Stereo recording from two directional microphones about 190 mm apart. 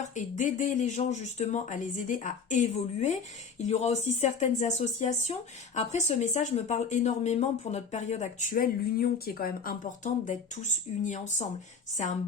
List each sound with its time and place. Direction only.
0.0 s speech: 40° left (ahead or behind)